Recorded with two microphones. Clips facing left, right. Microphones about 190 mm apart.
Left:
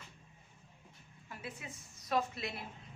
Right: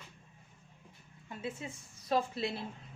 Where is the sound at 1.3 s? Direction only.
25° right (ahead or behind).